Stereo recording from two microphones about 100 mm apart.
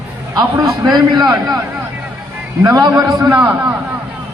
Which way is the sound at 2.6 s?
35° right (ahead or behind).